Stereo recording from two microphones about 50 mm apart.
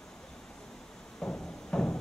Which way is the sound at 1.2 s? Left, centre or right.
Centre.